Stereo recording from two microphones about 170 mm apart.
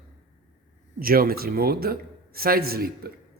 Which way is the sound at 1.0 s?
60° right (ahead or behind).